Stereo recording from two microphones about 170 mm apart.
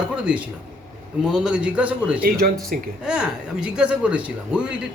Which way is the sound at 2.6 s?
60° right (ahead or behind).